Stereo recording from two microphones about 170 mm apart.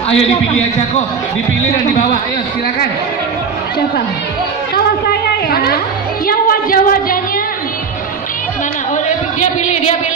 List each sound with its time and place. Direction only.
5.5 s a woman's voice: 60° left (ahead or behind)
9.4 s speech: 40° left (ahead or behind)